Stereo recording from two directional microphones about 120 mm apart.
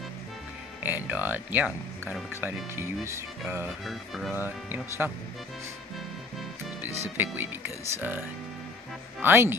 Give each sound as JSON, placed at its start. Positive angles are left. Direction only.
{"t": 0.8, "sound": "speech", "side_deg": -15}
{"t": 3.8, "sound": "music", "side_deg": 0}
{"t": 4.4, "sound": "speech", "side_deg": -15}
{"t": 7.2, "sound": "speech", "side_deg": -15}
{"t": 9.2, "sound": "speech", "side_deg": -20}